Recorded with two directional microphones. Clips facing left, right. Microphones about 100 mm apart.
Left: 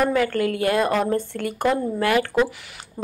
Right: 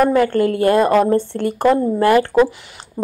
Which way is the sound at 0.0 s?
35° right (ahead or behind).